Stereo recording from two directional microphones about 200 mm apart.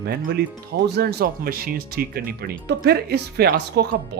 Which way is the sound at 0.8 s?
55° right (ahead or behind).